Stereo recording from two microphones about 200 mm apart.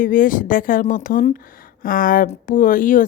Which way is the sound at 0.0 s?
40° left (ahead or behind).